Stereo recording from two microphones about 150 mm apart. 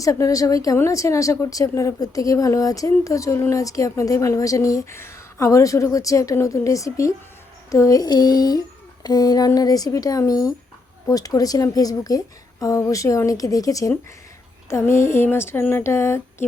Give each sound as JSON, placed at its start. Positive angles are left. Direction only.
{"t": 0.0, "sound": "speech", "side_deg": 20}